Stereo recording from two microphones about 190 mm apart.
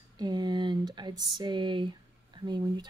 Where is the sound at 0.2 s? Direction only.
20° right (ahead or behind).